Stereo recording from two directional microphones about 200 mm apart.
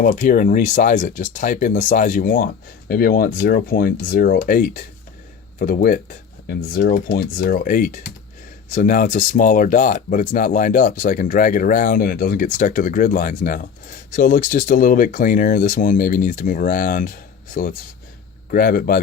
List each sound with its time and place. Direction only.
0.0 s speech: 45° left (ahead or behind)